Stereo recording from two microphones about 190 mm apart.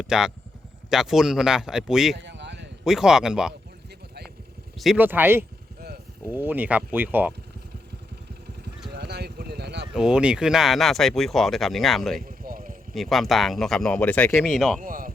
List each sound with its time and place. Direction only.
0.0 s speech: centre (ahead or behind)
2.1 s a sound: 65° right (ahead or behind)
2.8 s speech: centre (ahead or behind)
4.8 s speech: 5° right (ahead or behind)
8.9 s a sound: 60° right (ahead or behind)
9.9 s speech: 5° right (ahead or behind)
12.2 s a sound: 45° right (ahead or behind)
12.9 s speech: centre (ahead or behind)
14.8 s speech: 45° right (ahead or behind)